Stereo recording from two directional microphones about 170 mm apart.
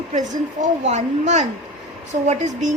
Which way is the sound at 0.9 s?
45° right (ahead or behind).